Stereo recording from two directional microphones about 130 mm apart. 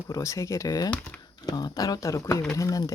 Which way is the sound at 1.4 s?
30° left (ahead or behind).